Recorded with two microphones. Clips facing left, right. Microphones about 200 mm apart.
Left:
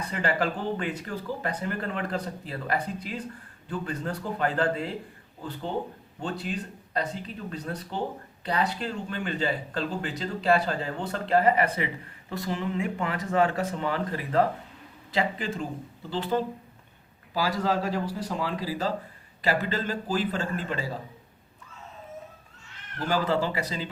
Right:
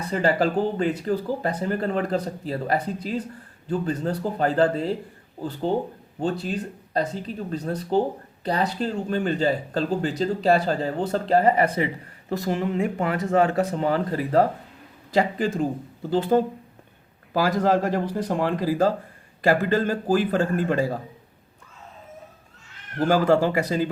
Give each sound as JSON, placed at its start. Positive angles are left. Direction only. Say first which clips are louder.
{"t": 0.1, "sound": "speech", "louder": "right 7 dB", "side_deg": -35}
{"t": 12.4, "sound": "a man's voice", "louder": "right 5 dB", "side_deg": -45}
{"t": 23.0, "sound": "a man's voice", "louder": "right 7 dB", "side_deg": -50}